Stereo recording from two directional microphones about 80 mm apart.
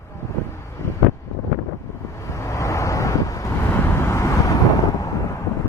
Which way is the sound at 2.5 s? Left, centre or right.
Left.